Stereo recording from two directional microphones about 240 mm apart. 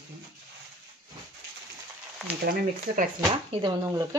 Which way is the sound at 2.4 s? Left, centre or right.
Right.